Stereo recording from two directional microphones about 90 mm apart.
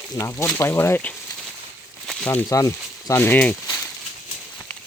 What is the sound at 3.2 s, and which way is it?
Speech, 20° left (ahead or behind).